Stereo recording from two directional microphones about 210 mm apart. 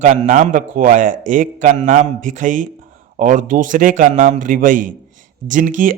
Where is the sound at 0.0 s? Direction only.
35° right (ahead or behind).